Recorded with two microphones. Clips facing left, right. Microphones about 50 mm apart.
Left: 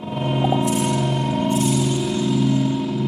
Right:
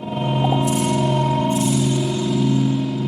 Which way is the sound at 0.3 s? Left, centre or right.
Centre.